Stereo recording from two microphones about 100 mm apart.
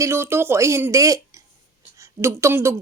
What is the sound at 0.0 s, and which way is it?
Speech, 25° right (ahead or behind).